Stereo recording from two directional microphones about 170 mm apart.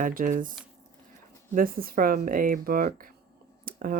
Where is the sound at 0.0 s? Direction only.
55° right (ahead or behind).